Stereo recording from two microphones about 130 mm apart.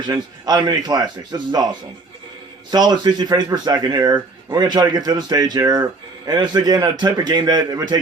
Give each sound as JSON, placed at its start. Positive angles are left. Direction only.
{"t": 0.1, "sound": "a man's voice", "side_deg": -30}